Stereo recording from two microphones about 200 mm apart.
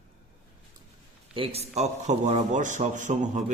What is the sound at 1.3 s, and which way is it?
A man's voice, 30° right (ahead or behind).